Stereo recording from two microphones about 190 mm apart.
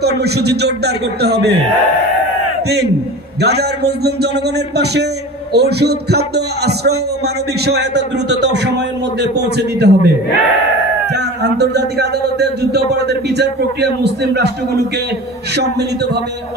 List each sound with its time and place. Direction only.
0.0 s a man's voice: 60° right (ahead or behind)
3.3 s a man's voice: 60° right (ahead or behind)
5.5 s a man's voice: 60° right (ahead or behind)
11.4 s a man's voice: 60° right (ahead or behind)